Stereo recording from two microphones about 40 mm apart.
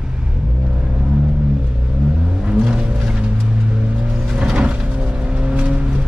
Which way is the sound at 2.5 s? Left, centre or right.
Right.